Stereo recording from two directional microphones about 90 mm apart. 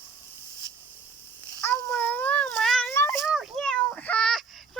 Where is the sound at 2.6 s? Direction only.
5° left (ahead or behind).